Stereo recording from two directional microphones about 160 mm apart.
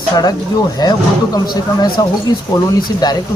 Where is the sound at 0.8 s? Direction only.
25° left (ahead or behind).